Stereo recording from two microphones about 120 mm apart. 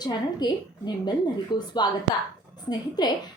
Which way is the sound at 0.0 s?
35° left (ahead or behind).